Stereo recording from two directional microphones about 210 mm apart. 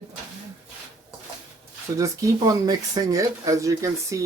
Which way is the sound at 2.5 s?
15° right (ahead or behind).